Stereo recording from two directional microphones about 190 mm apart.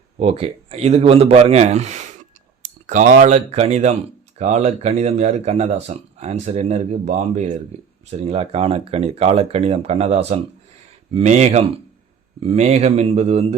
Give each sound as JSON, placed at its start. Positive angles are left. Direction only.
{"t": 0.2, "sound": "speech", "side_deg": -35}